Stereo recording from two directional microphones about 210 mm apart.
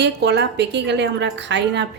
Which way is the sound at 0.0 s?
55° right (ahead or behind).